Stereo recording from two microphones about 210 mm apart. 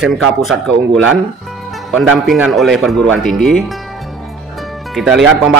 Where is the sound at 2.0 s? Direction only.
5° right (ahead or behind).